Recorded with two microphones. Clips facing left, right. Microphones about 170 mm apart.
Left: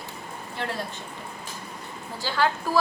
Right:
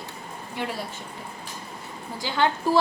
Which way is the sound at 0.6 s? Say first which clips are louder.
Even; 10° right (ahead or behind).